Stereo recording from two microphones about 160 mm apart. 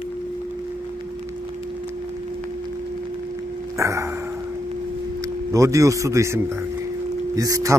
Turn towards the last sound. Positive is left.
turn(degrees=-20)  # may be behind; listen again after turning